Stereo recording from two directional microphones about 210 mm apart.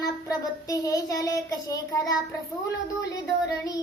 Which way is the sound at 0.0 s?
15° left (ahead or behind).